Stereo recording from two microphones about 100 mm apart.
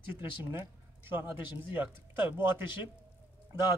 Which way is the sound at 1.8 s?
20° right (ahead or behind).